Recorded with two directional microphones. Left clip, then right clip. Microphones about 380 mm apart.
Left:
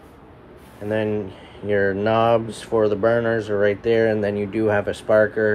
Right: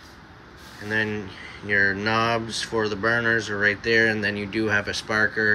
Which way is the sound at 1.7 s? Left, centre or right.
Left.